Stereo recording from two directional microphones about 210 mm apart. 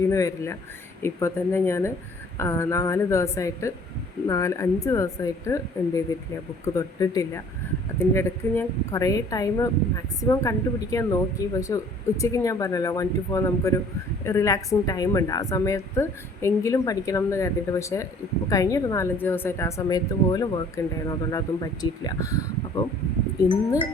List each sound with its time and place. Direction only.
0.1 s a woman's voice: 15° left (ahead or behind)